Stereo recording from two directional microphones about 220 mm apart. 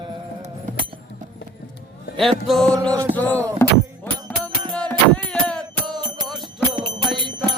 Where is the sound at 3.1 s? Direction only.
10° left (ahead or behind).